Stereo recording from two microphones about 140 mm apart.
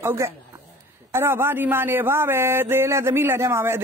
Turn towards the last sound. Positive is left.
turn(degrees=-20)  # may be behind; listen again after turning